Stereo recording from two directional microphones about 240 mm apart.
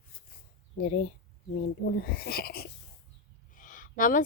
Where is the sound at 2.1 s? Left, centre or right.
Left.